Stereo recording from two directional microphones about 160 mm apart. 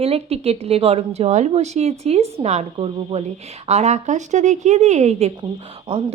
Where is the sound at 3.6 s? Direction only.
45° right (ahead or behind).